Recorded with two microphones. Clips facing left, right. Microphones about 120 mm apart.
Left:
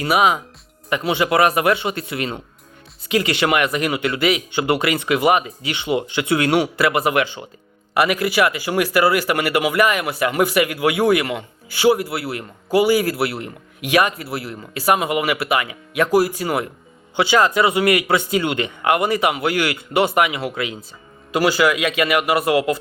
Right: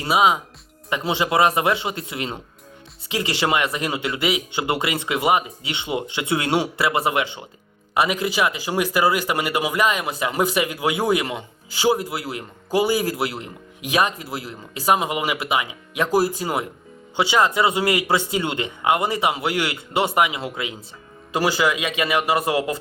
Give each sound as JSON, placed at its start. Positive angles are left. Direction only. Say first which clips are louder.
{"t": 0.0, "sound": "a man's voice", "louder": "left 1 dB", "side_deg": -25}